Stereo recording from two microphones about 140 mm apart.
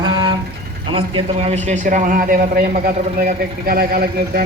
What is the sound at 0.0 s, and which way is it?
Vehicle, 30° right (ahead or behind).